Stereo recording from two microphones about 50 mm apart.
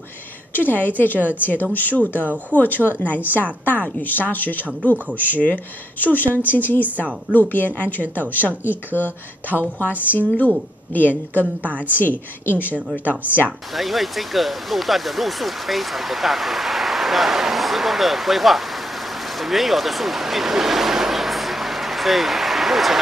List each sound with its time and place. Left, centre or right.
0.5 s speech: left
13.7 s speech: centre